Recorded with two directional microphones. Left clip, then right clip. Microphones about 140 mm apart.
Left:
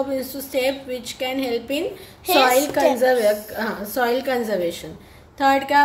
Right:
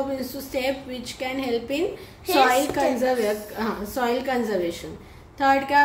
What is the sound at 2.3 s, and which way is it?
Speech, 65° left (ahead or behind).